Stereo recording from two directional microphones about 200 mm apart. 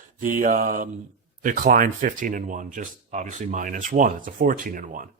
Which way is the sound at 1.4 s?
40° right (ahead or behind).